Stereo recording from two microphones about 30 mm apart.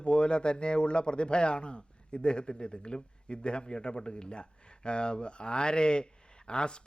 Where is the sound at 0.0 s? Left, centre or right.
Left.